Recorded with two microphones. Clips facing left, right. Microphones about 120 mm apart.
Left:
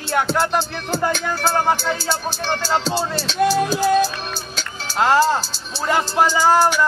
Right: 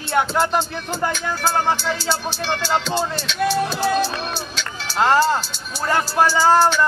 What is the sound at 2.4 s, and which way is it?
Speech, 35° left (ahead or behind).